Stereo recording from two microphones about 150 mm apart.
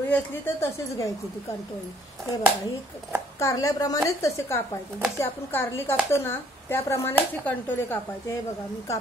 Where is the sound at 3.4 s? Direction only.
20° left (ahead or behind).